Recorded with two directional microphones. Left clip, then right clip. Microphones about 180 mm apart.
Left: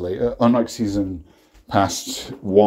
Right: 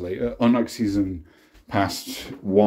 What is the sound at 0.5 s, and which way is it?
Speech, centre (ahead or behind).